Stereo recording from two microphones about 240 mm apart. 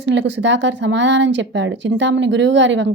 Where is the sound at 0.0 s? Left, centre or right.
Right.